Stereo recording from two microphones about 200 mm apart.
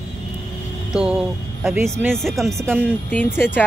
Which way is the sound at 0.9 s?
5° right (ahead or behind).